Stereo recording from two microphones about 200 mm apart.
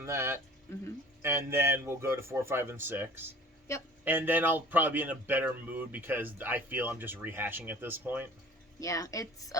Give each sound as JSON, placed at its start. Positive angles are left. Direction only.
{"t": 0.0, "sound": "a man's voice", "side_deg": -15}
{"t": 3.7, "sound": "speech", "side_deg": 15}
{"t": 4.0, "sound": "a man's voice", "side_deg": -10}
{"t": 8.8, "sound": "speech", "side_deg": 15}